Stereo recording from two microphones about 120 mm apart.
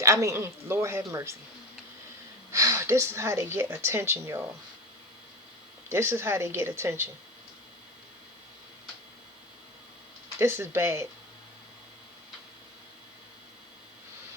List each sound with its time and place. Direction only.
0.0 s speech: 25° right (ahead or behind)
2.5 s speech: 25° right (ahead or behind)
5.9 s speech: 20° right (ahead or behind)
10.3 s speech: 20° right (ahead or behind)